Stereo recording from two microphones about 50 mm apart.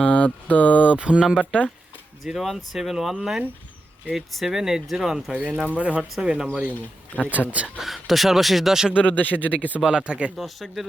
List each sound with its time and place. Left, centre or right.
0.0 s mantra: left
0.9 s speech: right
2.2 s speech: centre
4.1 s speech: centre
5.3 s speech: right
7.3 s speech: right
7.8 s speech: centre
9.0 s speech: left
9.8 s speech: right
10.3 s speech: centre